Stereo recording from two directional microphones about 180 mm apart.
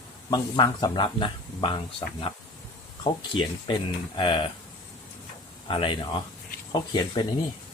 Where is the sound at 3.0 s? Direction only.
25° left (ahead or behind).